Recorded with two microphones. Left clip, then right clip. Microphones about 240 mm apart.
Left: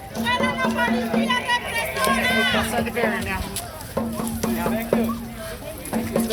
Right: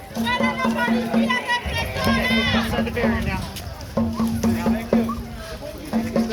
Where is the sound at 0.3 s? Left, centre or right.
Left.